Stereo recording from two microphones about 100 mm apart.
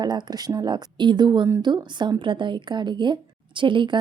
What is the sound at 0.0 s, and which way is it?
A woman's voice, 45° right (ahead or behind).